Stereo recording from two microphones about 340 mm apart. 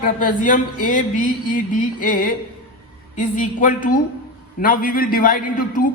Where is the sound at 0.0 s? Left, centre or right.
Left.